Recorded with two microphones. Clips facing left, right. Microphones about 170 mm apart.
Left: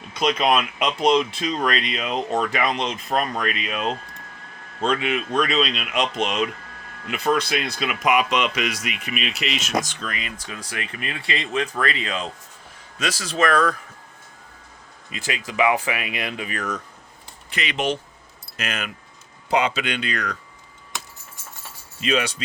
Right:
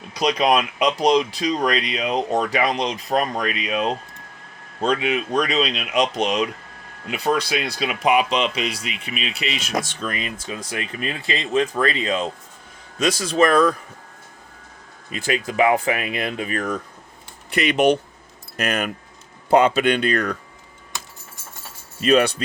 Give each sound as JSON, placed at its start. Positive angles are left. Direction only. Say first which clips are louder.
{"t": 0.1, "sound": "speech", "louder": "right 2 dB", "side_deg": -35}
{"t": 5.0, "sound": "speech", "louder": "right 1 dB", "side_deg": -40}
{"t": 10.4, "sound": "speech", "louder": "right 4 dB", "side_deg": -25}
{"t": 13.2, "sound": "speech", "louder": "right 3 dB", "side_deg": -35}
{"t": 15.2, "sound": "speech", "louder": "right 3 dB", "side_deg": -50}
{"t": 17.7, "sound": "speech", "louder": "right 8 dB", "side_deg": -55}
{"t": 22.0, "sound": "speech", "louder": "right 7 dB", "side_deg": -50}